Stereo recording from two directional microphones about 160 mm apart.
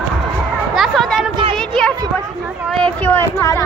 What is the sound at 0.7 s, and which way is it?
Speech, centre (ahead or behind).